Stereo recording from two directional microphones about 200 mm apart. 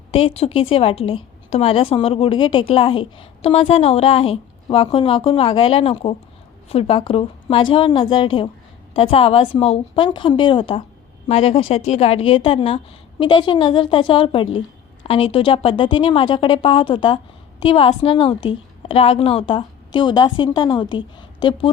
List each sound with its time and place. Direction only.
0.1 s a woman's voice: 30° left (ahead or behind)